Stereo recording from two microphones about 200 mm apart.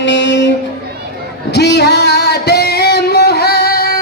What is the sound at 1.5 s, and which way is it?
Singing, 55° left (ahead or behind).